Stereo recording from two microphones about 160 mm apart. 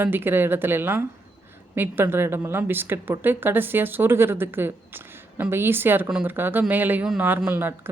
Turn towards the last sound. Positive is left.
turn(degrees=-10)  # may be behind; listen again after turning